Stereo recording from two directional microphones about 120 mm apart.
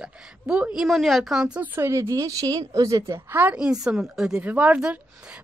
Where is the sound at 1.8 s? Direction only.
20° right (ahead or behind).